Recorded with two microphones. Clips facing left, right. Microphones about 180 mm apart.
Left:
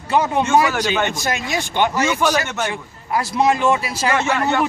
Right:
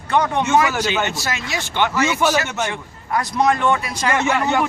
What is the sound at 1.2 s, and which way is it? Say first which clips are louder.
Speech: left 3 dB; 15° left (ahead or behind).